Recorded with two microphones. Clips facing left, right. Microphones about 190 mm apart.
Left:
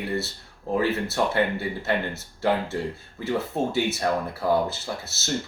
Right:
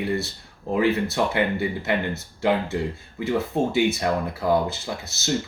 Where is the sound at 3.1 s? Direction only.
10° right (ahead or behind).